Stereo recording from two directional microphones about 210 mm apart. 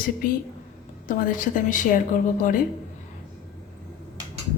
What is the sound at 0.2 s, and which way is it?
A woman's voice, 40° left (ahead or behind).